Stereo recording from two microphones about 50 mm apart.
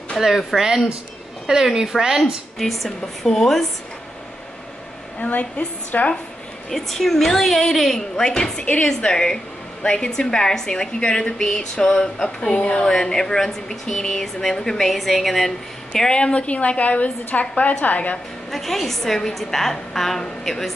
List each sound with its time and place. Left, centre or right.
0.2 s a woman's voice: centre
0.6 s a woman's voice: centre
2.6 s a woman's voice: centre
5.2 s a woman's voice: left
6.7 s a woman's voice: centre
8.2 s a woman's voice: centre
12.8 s a woman's voice: centre
15.9 s a woman's voice: centre
18.5 s a woman's voice: centre